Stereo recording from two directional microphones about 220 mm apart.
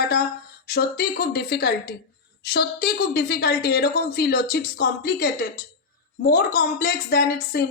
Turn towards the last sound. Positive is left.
turn(degrees=45)  # may be behind; listen again after turning